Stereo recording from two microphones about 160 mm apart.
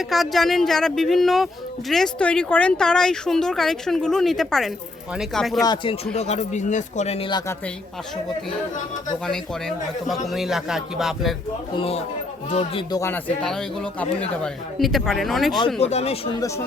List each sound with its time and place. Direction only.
0.1 s speech: centre (ahead or behind)
5.6 s speech: 30° left (ahead or behind)
6.1 s speech: 45° left (ahead or behind)
7.3 s a man's voice: 25° left (ahead or behind)
9.2 s speech: 5° left (ahead or behind)
12.5 s speech: 40° left (ahead or behind)
12.9 s speech: 20° left (ahead or behind)
13.4 s speech: 5° left (ahead or behind)
15.6 s speech: 40° left (ahead or behind)